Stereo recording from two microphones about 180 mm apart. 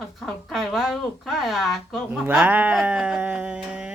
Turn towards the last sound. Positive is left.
turn(degrees=-5)  # may be behind; listen again after turning